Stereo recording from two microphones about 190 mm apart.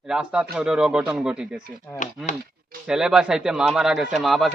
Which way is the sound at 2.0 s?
40° left (ahead or behind).